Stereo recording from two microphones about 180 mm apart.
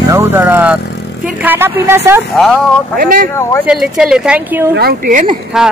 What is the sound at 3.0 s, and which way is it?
Speech, 50° right (ahead or behind).